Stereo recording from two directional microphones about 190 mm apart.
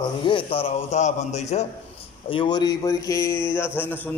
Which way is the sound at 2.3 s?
25° left (ahead or behind).